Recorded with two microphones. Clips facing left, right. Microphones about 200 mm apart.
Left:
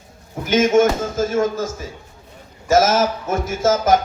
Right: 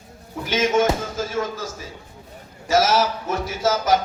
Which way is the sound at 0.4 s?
45° left (ahead or behind).